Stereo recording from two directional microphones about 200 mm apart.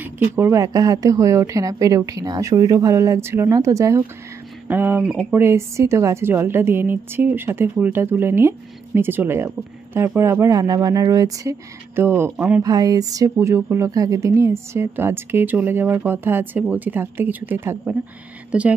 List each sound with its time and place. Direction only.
0.0 s a woman's voice: 10° right (ahead or behind)